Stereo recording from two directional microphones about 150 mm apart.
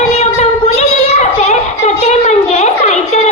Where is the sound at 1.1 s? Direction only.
50° left (ahead or behind).